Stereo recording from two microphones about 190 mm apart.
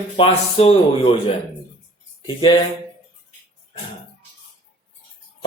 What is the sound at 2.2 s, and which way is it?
Speech, 25° left (ahead or behind).